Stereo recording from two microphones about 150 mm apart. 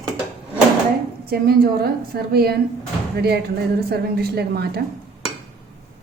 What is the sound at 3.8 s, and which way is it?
Speech, 90° right.